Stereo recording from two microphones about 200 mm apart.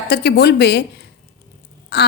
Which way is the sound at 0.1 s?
55° left (ahead or behind).